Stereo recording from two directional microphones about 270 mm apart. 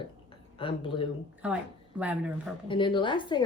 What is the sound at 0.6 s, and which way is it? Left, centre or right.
Speech, centre.